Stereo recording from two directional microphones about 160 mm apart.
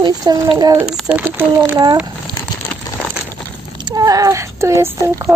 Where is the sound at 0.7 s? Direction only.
5° right (ahead or behind).